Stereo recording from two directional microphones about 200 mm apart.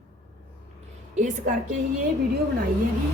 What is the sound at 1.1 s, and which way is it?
Speech, 40° right (ahead or behind).